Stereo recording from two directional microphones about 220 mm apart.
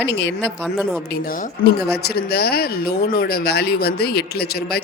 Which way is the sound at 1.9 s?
45° left (ahead or behind).